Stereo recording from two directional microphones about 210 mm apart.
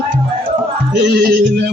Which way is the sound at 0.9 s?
55° right (ahead or behind).